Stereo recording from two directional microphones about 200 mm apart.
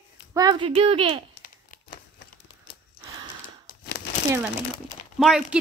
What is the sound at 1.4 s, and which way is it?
Crumpling, 45° left (ahead or behind).